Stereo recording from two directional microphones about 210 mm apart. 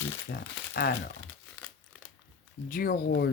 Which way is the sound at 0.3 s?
50° left (ahead or behind).